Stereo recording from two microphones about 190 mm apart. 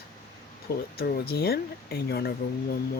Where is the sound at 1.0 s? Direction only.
55° left (ahead or behind).